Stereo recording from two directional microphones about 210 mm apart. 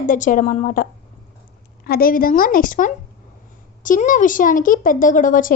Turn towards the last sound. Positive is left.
turn(degrees=40)  # may be behind; listen again after turning